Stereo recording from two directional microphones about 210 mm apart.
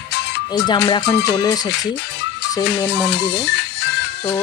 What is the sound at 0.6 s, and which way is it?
Speech, 20° left (ahead or behind).